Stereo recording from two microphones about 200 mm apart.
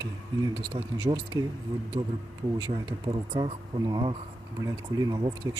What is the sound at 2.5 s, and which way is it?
Speech, 20° right (ahead or behind).